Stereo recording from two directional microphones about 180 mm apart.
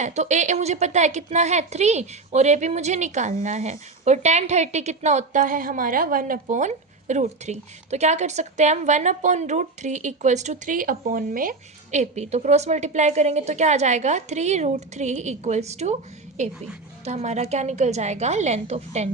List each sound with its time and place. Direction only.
0.0 s a woman's voice: 40° right (ahead or behind)